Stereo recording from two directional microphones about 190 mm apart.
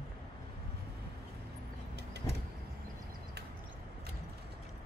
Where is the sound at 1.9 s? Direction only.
60° right (ahead or behind).